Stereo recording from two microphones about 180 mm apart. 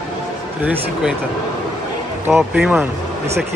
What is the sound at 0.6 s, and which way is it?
Speech, 10° right (ahead or behind).